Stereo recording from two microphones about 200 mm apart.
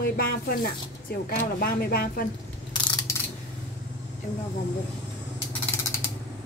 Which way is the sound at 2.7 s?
20° left (ahead or behind).